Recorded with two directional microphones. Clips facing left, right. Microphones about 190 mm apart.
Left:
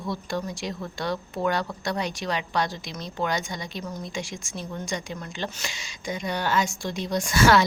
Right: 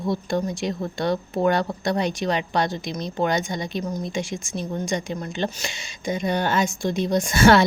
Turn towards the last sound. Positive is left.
turn(degrees=-25)  # may be behind; listen again after turning